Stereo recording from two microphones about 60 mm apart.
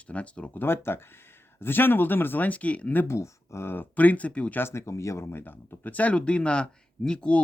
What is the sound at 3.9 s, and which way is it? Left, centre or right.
Speech, left.